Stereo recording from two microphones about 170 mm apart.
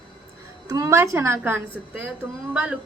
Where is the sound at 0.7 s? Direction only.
20° right (ahead or behind).